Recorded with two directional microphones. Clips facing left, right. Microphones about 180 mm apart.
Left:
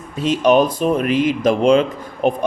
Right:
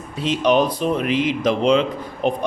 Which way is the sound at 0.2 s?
45° left (ahead or behind).